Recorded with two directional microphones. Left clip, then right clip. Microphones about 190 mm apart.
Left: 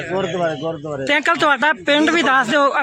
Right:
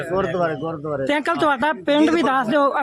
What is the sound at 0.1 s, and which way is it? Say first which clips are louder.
Speech: left 1 dB; 25° left (ahead or behind).